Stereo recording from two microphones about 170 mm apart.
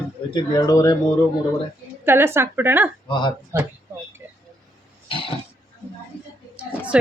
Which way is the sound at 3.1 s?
25° left (ahead or behind).